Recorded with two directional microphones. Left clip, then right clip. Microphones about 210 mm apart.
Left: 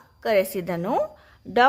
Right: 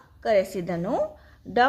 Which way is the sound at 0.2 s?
35° left (ahead or behind).